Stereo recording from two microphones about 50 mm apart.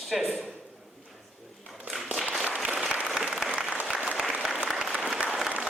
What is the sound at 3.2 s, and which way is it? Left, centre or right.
Applause, centre.